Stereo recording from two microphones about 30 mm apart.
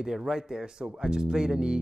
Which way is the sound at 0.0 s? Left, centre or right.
Right.